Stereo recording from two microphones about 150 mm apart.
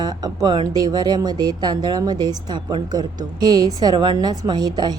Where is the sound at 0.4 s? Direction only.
25° right (ahead or behind).